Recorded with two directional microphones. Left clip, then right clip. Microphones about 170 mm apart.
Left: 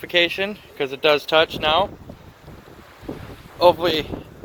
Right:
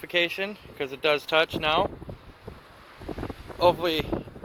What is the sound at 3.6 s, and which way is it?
Speech, 30° left (ahead or behind).